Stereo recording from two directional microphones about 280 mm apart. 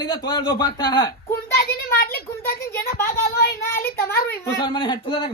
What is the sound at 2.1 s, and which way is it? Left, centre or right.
A woman's voice, left.